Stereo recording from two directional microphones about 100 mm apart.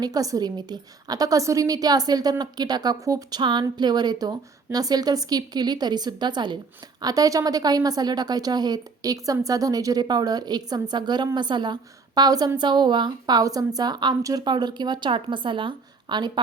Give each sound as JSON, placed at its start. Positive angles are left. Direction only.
{"t": 0.0, "sound": "a woman's voice", "side_deg": -40}
{"t": 7.0, "sound": "a woman's voice", "side_deg": -35}
{"t": 14.4, "sound": "speech", "side_deg": -50}